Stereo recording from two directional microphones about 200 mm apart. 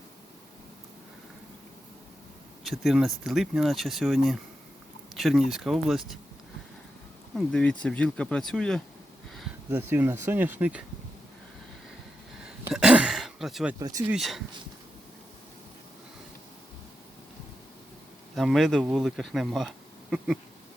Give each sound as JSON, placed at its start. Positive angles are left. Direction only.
{"t": 2.6, "sound": "speech", "side_deg": 0}
{"t": 7.3, "sound": "speech", "side_deg": 5}
{"t": 9.6, "sound": "speech", "side_deg": -10}
{"t": 12.5, "sound": "a sound", "side_deg": -5}
{"t": 13.7, "sound": "speech", "side_deg": -20}
{"t": 14.1, "sound": "speech", "side_deg": 0}
{"t": 18.3, "sound": "speech", "side_deg": 0}